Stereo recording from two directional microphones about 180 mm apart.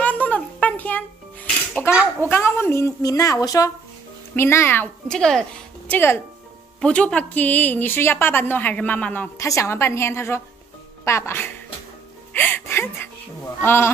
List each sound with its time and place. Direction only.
0.0 s music: 10° left (ahead or behind)
1.9 s a sound: 15° left (ahead or behind)
2.2 s a woman's voice: 10° left (ahead or behind)